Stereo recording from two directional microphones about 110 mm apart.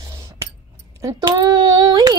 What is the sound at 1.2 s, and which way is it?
Child singing, 40° right (ahead or behind).